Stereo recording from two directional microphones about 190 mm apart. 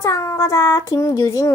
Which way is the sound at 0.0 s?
15° left (ahead or behind).